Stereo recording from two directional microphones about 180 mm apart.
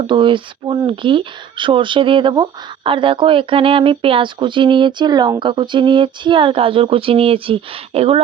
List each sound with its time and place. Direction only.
0.0 s speech: 25° right (ahead or behind)